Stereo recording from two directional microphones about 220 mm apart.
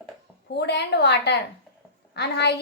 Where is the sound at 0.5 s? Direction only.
50° left (ahead or behind).